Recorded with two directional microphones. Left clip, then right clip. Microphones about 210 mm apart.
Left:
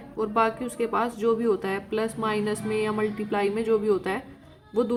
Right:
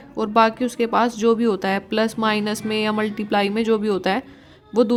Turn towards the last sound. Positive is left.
turn(degrees=-50)  # may be behind; listen again after turning